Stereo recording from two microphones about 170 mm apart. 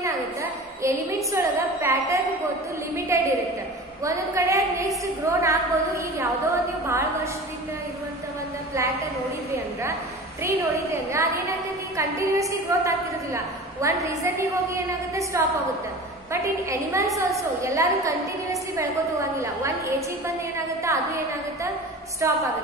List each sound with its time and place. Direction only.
0.0 s a woman's voice: 15° right (ahead or behind)
10.4 s a woman's voice: 15° right (ahead or behind)
16.9 s a woman's voice: 20° right (ahead or behind)
22.2 s a woman's voice: 15° right (ahead or behind)